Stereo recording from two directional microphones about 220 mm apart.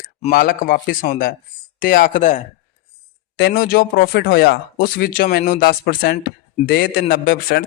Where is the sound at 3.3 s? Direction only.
45° left (ahead or behind).